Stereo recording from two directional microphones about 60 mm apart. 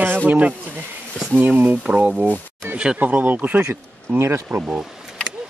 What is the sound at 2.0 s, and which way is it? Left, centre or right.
Speech, right.